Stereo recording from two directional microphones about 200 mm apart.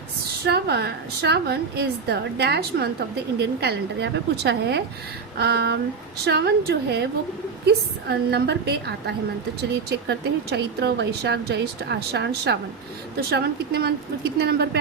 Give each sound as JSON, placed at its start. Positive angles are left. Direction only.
{"t": 0.4, "sound": "a woman's voice", "side_deg": -55}